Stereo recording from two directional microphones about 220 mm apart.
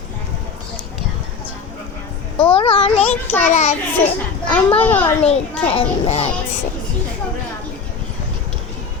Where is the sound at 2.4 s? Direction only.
25° left (ahead or behind).